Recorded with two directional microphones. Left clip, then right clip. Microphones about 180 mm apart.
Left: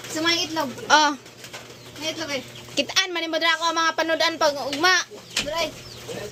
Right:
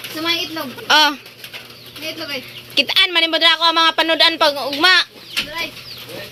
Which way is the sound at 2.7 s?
5° right (ahead or behind).